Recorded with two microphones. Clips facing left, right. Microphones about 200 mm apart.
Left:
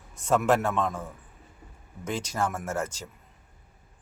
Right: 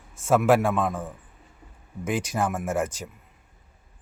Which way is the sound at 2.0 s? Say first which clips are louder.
Right 3 dB; 10° right (ahead or behind).